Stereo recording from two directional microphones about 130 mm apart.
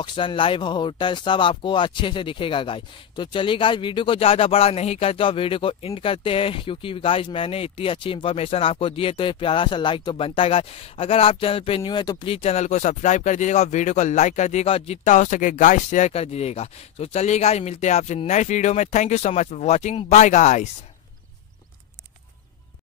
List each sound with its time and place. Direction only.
0.0 s speech: 40° left (ahead or behind); by 16.1 s 70° left (ahead or behind)
16.1 s speech: 50° left (ahead or behind)